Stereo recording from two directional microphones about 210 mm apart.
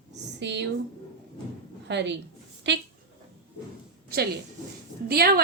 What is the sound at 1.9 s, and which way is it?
Speech, 55° right (ahead or behind).